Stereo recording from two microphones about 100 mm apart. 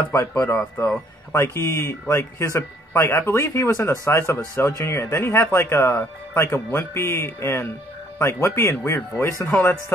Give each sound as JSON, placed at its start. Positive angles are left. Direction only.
{"t": 0.1, "sound": "speech", "side_deg": 40}
{"t": 0.4, "sound": "speech", "side_deg": 20}